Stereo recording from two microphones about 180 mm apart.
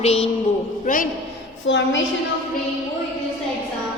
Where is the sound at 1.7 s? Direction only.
90° left.